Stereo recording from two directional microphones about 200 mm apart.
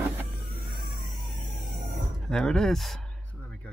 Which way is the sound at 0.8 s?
45° left (ahead or behind).